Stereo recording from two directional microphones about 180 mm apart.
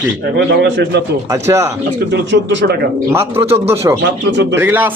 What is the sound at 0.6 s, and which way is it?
Speech, 75° right (ahead or behind).